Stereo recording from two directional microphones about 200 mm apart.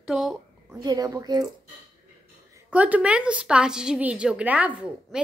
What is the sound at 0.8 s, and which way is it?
Speech, 20° right (ahead or behind).